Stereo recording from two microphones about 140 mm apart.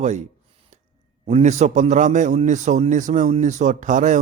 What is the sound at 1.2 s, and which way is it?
A man's voice, 50° right (ahead or behind).